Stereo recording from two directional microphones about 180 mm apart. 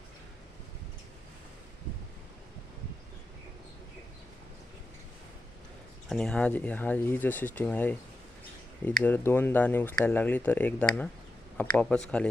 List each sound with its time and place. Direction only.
6.1 s speech: 5° left (ahead or behind)
9.0 s speech: 10° left (ahead or behind)